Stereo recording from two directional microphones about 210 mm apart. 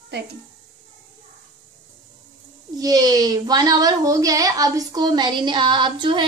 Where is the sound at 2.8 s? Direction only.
15° right (ahead or behind).